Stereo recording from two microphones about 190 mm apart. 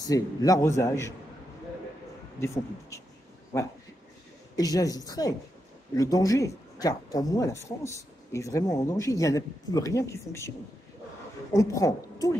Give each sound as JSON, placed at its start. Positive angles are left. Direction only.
{"t": 0.0, "sound": "speech", "side_deg": 20}
{"t": 2.4, "sound": "speech", "side_deg": 15}
{"t": 4.6, "sound": "a woman's voice", "side_deg": 20}
{"t": 11.5, "sound": "speech", "side_deg": 15}